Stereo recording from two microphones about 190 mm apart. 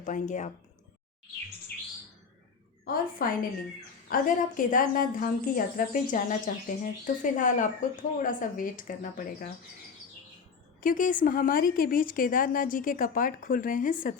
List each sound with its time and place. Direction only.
0.0 s speech: 40° left (ahead or behind)
2.8 s speech: 50° left (ahead or behind)
10.8 s speech: 45° left (ahead or behind)